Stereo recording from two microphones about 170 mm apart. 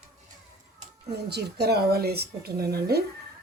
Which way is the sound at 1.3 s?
75° right (ahead or behind).